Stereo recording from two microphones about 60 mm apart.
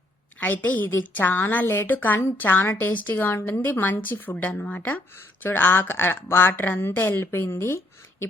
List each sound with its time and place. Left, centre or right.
0.3 s a woman's voice: left